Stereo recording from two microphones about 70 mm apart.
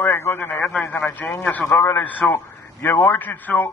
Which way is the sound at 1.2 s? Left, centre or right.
Left.